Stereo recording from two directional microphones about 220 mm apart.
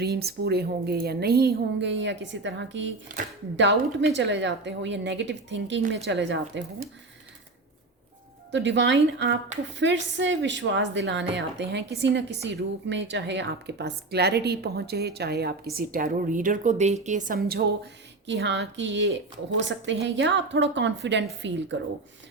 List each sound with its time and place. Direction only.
0.0 s a woman's voice: 45° right (ahead or behind)
8.5 s a woman's voice: 55° right (ahead or behind)